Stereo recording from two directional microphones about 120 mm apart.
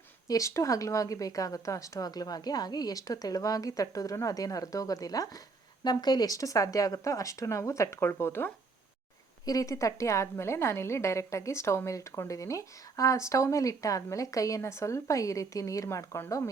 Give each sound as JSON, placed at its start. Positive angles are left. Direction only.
{"t": 0.3, "sound": "a woman's voice", "side_deg": 25}